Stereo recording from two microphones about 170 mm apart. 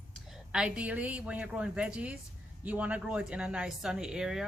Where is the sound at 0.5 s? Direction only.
5° right (ahead or behind).